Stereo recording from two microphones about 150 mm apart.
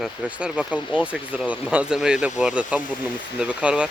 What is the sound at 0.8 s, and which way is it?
Speech, 35° left (ahead or behind).